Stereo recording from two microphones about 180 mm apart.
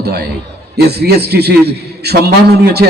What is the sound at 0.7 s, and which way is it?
A man's voice, 65° right (ahead or behind).